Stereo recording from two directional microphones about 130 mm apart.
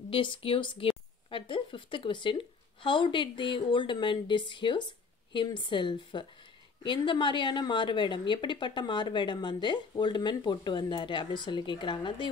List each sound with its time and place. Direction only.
0.1 s speech: 40° left (ahead or behind)